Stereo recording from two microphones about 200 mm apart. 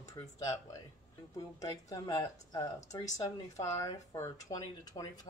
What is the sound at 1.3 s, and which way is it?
Speech, 15° left (ahead or behind).